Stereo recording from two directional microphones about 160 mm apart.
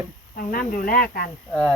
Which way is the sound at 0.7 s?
60° left (ahead or behind).